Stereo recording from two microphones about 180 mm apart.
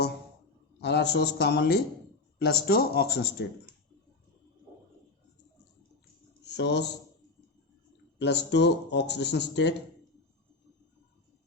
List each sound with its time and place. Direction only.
0.8 s speech: 70° left (ahead or behind)
6.4 s a sound: 75° left (ahead or behind)
8.2 s speech: 75° left (ahead or behind)